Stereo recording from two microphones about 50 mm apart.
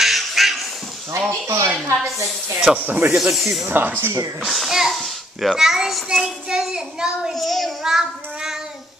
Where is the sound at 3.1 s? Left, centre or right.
Centre.